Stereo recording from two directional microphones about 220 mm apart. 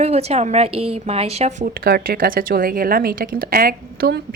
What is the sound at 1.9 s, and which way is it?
A woman's voice, 45° right (ahead or behind).